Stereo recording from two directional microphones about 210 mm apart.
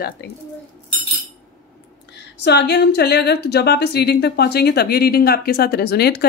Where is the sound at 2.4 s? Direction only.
55° left (ahead or behind).